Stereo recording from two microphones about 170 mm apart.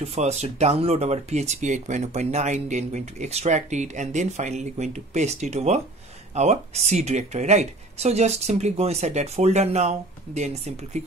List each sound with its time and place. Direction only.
0.0 s speech: 40° right (ahead or behind)